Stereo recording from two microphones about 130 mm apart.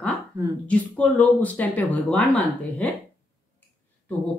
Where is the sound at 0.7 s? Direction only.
10° left (ahead or behind).